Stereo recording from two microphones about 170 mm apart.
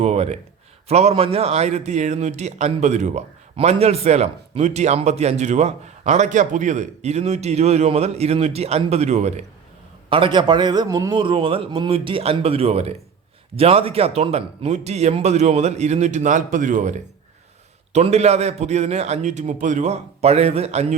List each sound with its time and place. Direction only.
0.0 s a sound: 40° right (ahead or behind)
0.9 s a man's voice: 40° right (ahead or behind)
10.1 s a man's voice: 30° right (ahead or behind); by 16.9 s 50° right (ahead or behind)
17.9 s a man's voice: 40° right (ahead or behind)